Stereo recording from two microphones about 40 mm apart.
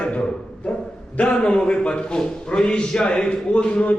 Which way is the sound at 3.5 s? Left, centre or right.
Left.